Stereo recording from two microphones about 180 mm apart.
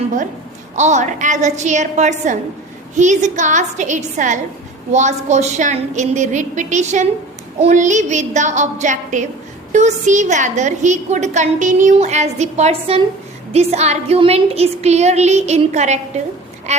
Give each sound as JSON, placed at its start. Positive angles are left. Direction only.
{"t": 0.8, "sound": "a woman's voice", "side_deg": -40}